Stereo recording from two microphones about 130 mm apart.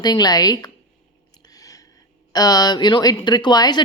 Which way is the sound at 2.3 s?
30° left (ahead or behind).